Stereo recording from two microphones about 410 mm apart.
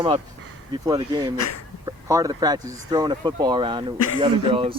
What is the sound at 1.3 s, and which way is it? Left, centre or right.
Speech, left.